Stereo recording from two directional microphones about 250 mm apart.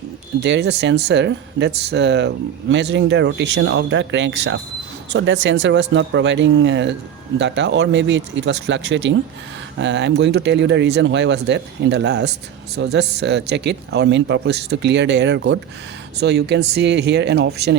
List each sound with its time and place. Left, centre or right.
0.4 s speech: right